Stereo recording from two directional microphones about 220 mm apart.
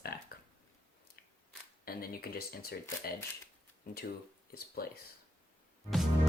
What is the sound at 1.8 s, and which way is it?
Speech, 45° left (ahead or behind).